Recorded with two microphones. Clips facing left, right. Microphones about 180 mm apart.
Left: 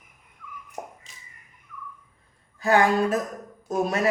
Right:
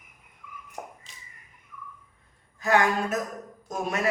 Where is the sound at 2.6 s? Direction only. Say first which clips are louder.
Left 3 dB; 35° left (ahead or behind).